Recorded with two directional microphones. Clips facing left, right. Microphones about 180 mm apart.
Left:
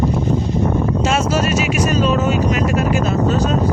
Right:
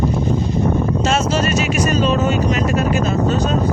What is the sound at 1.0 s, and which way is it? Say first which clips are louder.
A woman's voice: even; 10° left (ahead or behind).